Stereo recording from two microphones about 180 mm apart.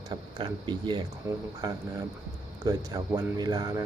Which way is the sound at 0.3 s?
25° right (ahead or behind).